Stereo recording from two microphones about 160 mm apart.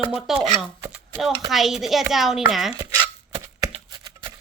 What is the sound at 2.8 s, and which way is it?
Chopping, 25° right (ahead or behind).